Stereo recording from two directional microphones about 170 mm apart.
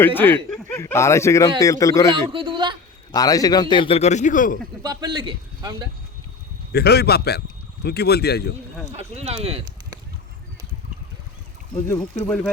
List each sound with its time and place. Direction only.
0.0 s a man's voice: 10° left (ahead or behind)
2.3 s a man's voice: 30° right (ahead or behind)
3.1 s a man's voice: 20° left (ahead or behind); by 4.5 s 50° left (ahead or behind)
4.8 s a man's voice: 25° right (ahead or behind)
6.7 s speech: 70° left (ahead or behind)
8.9 s speech: 40° right (ahead or behind)
11.9 s a man's voice: 10° left (ahead or behind)